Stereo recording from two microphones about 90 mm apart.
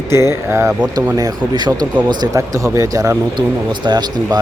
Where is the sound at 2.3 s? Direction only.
35° right (ahead or behind).